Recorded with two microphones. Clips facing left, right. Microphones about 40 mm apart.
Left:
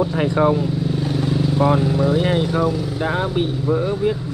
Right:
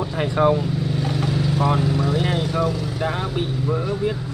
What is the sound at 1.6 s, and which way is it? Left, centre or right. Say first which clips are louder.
Speech: left 5 dB; centre.